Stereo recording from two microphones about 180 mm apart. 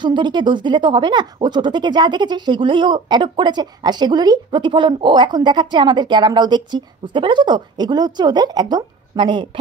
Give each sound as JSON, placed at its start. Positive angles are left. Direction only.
{"t": 0.0, "sound": "speech", "side_deg": -25}